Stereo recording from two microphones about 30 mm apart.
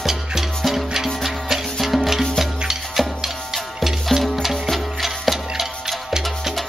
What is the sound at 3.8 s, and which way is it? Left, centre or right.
Music, centre.